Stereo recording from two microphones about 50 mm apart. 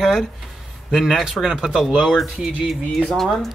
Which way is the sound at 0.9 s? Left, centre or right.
Centre.